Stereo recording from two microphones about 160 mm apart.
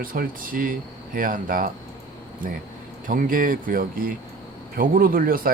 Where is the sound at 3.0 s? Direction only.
60° right (ahead or behind).